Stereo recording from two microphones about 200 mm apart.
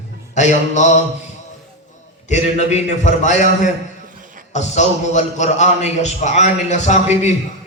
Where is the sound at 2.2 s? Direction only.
35° left (ahead or behind).